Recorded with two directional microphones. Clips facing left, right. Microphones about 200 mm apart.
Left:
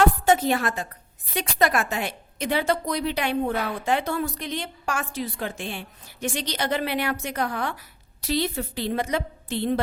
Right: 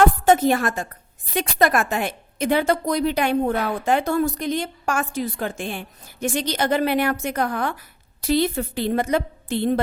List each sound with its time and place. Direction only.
0.0 s a woman's voice: 50° right (ahead or behind)